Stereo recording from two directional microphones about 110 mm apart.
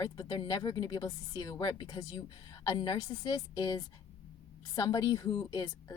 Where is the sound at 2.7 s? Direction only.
45° left (ahead or behind).